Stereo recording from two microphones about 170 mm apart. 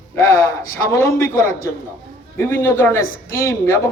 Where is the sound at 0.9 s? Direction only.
15° left (ahead or behind).